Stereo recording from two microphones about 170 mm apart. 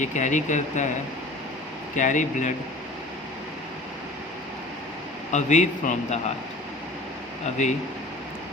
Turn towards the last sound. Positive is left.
turn(degrees=45)  # may be behind; listen again after turning